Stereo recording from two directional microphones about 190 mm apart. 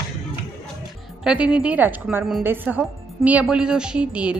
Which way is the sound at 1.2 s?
5° right (ahead or behind).